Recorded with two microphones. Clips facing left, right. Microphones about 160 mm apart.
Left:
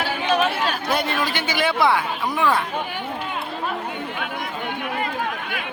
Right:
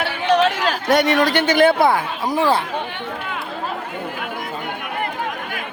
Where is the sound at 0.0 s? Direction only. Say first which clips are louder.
Right 4 dB; 70° right (ahead or behind); by 2.6 s 30° right (ahead or behind).